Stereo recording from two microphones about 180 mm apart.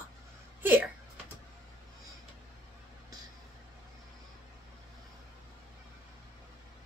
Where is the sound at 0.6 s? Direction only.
10° right (ahead or behind).